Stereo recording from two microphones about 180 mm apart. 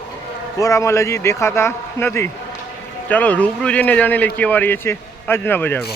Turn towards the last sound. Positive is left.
turn(degrees=10)  # may be behind; listen again after turning